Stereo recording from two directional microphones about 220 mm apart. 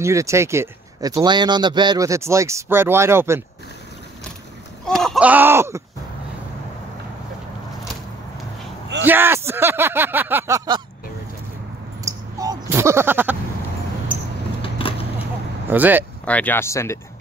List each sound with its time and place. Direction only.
0.0 s speech: 15° right (ahead or behind)
4.8 s speech: centre (ahead or behind)
9.0 s speech: 10° right (ahead or behind)
12.0 s a sound: 15° right (ahead or behind)
14.6 s vehicle: 25° left (ahead or behind)
15.7 s speech: 10° right (ahead or behind)
16.3 s speech: 5° left (ahead or behind)